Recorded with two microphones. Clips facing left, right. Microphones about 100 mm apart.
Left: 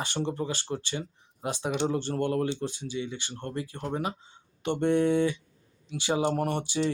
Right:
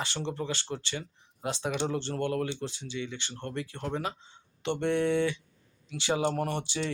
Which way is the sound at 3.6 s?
40° left (ahead or behind).